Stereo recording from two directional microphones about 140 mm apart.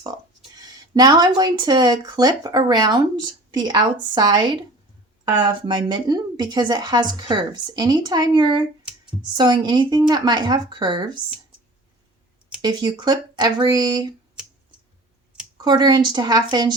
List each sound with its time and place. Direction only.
0.0 s speech: 25° right (ahead or behind)
12.6 s speech: 30° right (ahead or behind)
15.6 s speech: 30° right (ahead or behind)